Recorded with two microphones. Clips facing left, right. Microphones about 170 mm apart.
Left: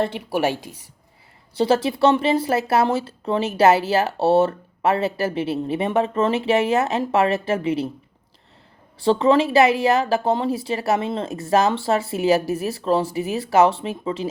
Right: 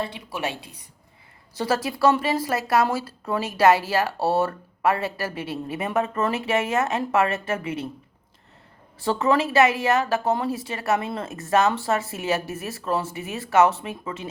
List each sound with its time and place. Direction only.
1.5 s speech: 30° left (ahead or behind)
9.0 s speech: 30° left (ahead or behind)